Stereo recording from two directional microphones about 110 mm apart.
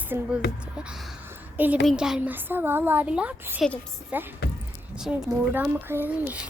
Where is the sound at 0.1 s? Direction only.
10° right (ahead or behind).